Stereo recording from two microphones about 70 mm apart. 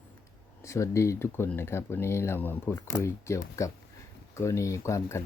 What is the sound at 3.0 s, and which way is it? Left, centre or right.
Speech, left.